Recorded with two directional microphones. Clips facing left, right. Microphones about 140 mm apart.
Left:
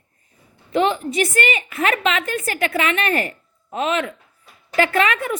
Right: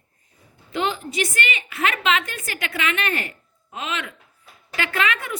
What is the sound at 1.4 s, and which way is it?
A woman's voice, 40° left (ahead or behind).